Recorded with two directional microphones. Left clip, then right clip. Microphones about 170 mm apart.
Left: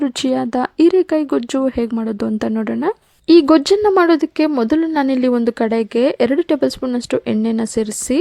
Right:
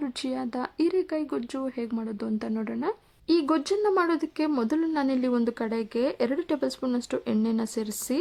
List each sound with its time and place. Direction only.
0.0 s a woman's voice: 40° left (ahead or behind)